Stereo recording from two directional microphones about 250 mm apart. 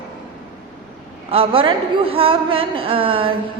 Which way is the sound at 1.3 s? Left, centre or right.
Right.